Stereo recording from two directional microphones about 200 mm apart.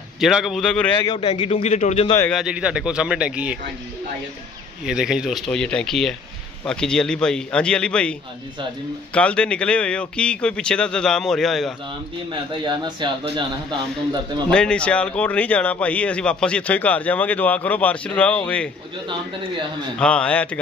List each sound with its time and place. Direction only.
0.2 s a man's voice: centre (ahead or behind)
1.0 s a man's voice: 25° left (ahead or behind)
2.1 s speech: 5° left (ahead or behind)
2.4 s a man's voice: 5° right (ahead or behind)
4.8 s a man's voice: 5° right (ahead or behind)
12.3 s speech: 20° right (ahead or behind)
14.5 s speech: 5° left (ahead or behind)
20.0 s speech: 5° left (ahead or behind)